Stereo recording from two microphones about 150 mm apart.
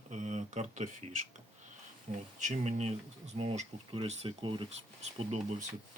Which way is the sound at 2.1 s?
55° right (ahead or behind).